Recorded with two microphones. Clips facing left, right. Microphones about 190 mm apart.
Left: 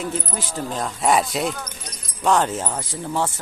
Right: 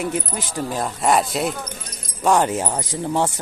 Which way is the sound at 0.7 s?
10° right (ahead or behind).